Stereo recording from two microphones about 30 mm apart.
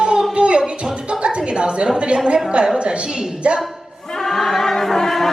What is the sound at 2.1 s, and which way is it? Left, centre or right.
Speech, right.